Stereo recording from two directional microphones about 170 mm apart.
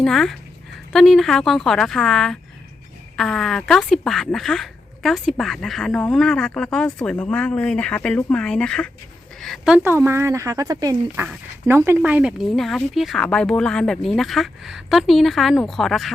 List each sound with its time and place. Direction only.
0.0 s speech: 5° left (ahead or behind)